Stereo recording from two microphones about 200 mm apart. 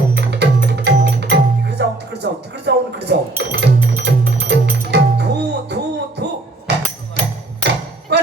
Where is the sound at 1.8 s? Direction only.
55° right (ahead or behind).